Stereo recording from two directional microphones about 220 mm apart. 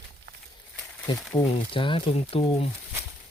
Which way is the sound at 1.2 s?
10° left (ahead or behind).